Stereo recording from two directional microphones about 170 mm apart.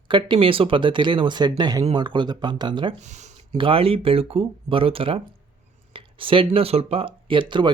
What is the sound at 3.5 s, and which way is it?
Speech, 30° right (ahead or behind).